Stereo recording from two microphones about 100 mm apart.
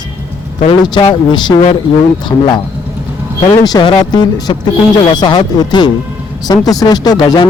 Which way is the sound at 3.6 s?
45° left (ahead or behind).